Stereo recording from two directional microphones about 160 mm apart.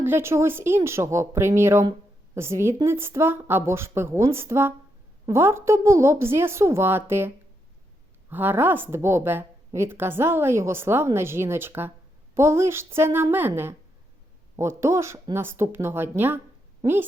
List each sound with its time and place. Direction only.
0.0 s a woman's voice: 15° right (ahead or behind)